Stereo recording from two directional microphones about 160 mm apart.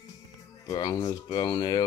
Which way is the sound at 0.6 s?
25° left (ahead or behind).